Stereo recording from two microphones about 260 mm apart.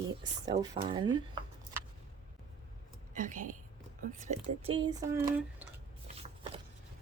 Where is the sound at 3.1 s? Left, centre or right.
Right; by 5.6 s centre.